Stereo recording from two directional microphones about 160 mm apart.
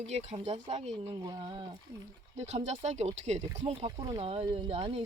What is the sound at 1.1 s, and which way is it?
Speech, 25° right (ahead or behind).